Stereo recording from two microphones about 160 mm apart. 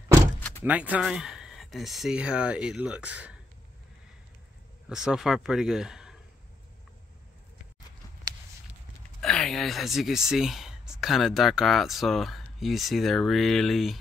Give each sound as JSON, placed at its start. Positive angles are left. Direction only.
{"t": 0.4, "sound": "door", "side_deg": 15}
{"t": 0.7, "sound": "speech", "side_deg": -10}
{"t": 4.8, "sound": "speech", "side_deg": -5}
{"t": 9.2, "sound": "speech", "side_deg": 5}